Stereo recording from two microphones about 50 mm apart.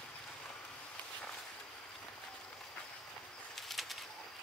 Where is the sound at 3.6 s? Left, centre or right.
Centre.